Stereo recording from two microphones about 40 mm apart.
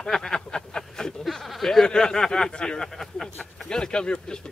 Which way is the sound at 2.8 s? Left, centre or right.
Centre.